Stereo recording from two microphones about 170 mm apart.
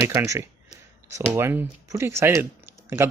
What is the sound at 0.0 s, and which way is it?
Speech, 15° right (ahead or behind).